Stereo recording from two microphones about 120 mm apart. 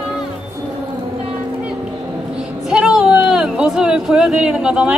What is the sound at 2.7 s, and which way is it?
A woman's voice, 5° right (ahead or behind).